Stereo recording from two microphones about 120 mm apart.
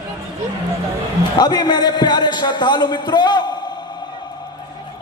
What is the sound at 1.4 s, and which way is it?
A man's voice, 35° left (ahead or behind).